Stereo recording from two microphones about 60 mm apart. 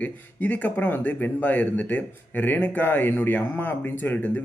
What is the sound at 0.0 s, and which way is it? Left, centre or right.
A man's voice, left.